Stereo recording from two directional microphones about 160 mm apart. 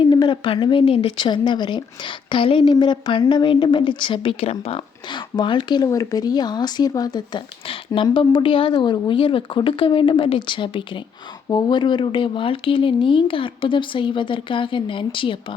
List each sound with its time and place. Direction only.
0.0 s speech: 30° left (ahead or behind)